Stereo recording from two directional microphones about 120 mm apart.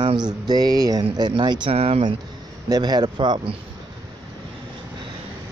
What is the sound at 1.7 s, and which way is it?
Speech, 55° right (ahead or behind).